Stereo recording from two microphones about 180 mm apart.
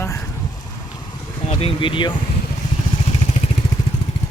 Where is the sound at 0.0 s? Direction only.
15° left (ahead or behind).